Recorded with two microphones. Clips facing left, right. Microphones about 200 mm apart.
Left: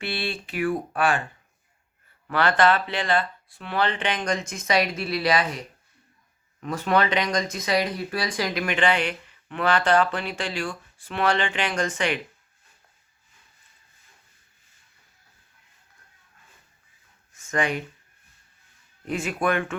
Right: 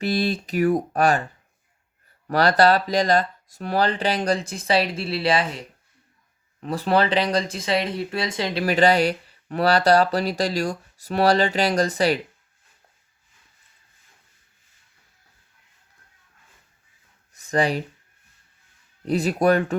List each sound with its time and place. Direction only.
0.0 s speech: 40° right (ahead or behind)
2.2 s speech: 40° right (ahead or behind)
17.3 s a sound: 35° right (ahead or behind)
19.0 s speech: 35° right (ahead or behind)